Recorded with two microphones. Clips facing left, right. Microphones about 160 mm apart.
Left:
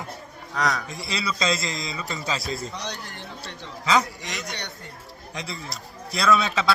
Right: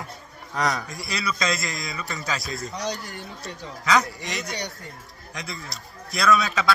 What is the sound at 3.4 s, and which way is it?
Speech, 25° left (ahead or behind).